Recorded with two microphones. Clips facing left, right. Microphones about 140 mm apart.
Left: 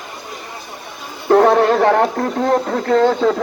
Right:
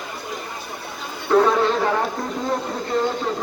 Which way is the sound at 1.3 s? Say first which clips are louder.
Left 6 dB; 55° left (ahead or behind).